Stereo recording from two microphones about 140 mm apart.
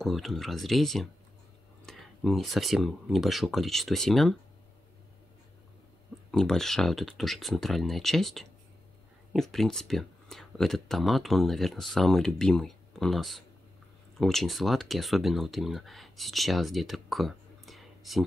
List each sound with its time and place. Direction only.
0.0 s speech: centre (ahead or behind)
6.3 s speech: 5° left (ahead or behind)